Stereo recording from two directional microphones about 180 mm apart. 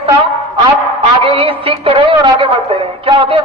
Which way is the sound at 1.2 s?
30° right (ahead or behind).